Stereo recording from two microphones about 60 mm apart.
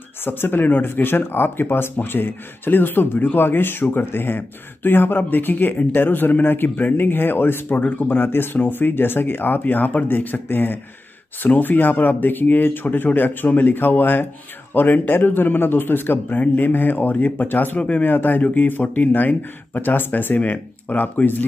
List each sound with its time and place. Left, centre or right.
0.2 s speech: left